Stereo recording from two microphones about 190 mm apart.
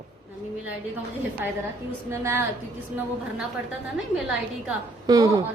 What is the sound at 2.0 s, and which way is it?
Speech, 15° right (ahead or behind).